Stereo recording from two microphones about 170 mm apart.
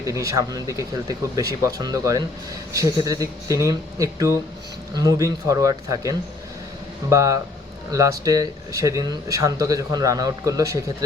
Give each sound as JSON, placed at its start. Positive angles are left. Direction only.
{"t": 0.0, "sound": "speech", "side_deg": -20}